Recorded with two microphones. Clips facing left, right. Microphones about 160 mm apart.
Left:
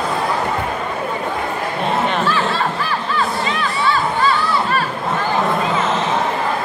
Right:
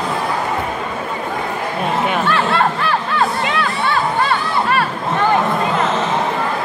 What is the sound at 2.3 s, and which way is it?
Snicker, 60° right (ahead or behind).